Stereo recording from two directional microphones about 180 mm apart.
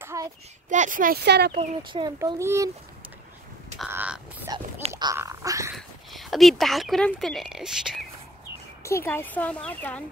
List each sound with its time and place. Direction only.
0.0 s child singing: 15° right (ahead or behind)
0.7 s speech: 45° right (ahead or behind)
1.2 s speech: 70° right (ahead or behind)
1.9 s speech: 25° right (ahead or behind)
2.1 s speech: 15° right (ahead or behind)
3.8 s frog: 5° right (ahead or behind)
4.5 s speech: 20° right (ahead or behind)
5.8 s speech: centre (ahead or behind)
8.8 s speech: 15° left (ahead or behind)